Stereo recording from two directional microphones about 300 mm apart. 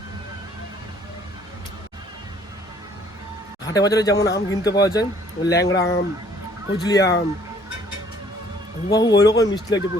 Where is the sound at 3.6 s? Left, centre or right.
Centre.